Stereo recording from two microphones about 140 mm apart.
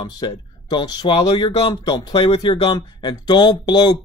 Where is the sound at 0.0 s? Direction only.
30° left (ahead or behind).